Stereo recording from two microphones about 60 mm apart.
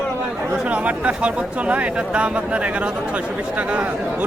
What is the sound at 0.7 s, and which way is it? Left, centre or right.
Speech, right.